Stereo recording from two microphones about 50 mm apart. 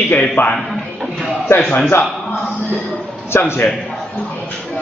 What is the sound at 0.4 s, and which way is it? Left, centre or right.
Speech, left.